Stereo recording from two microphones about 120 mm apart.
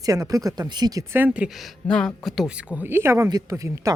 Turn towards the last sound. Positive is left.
turn(degrees=-30)  # may be behind; listen again after turning